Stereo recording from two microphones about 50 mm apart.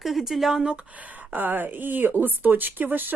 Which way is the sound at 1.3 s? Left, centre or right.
Right.